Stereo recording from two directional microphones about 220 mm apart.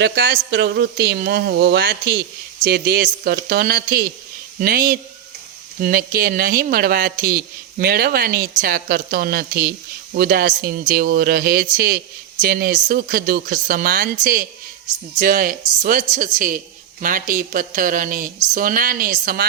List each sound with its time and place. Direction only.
0.0 s a man's voice: 50° right (ahead or behind)